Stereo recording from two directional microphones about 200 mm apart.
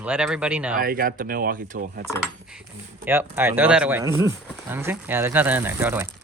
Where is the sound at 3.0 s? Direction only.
10° right (ahead or behind).